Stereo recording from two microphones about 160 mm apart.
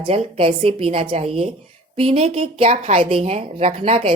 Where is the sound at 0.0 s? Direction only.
35° right (ahead or behind).